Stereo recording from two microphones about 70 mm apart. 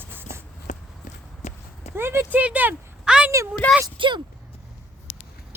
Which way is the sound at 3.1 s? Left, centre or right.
Centre.